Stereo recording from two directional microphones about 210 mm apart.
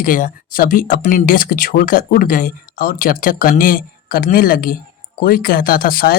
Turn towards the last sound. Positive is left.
turn(degrees=45)  # may be behind; listen again after turning